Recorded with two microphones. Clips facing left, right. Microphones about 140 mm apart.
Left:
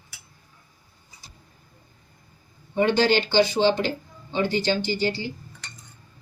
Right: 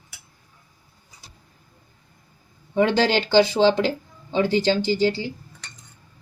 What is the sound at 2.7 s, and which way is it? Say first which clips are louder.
Speech: right 1 dB; 90° right.